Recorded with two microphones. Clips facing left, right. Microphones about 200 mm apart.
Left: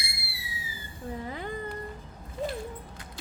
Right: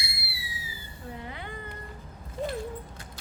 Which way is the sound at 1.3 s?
40° left (ahead or behind).